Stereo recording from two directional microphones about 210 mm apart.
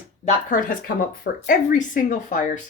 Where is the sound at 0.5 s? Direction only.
40° left (ahead or behind).